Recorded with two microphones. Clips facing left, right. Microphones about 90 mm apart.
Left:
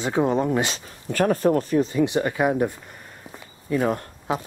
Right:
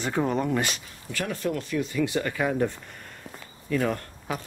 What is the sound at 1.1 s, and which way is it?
Speech, 45° left (ahead or behind).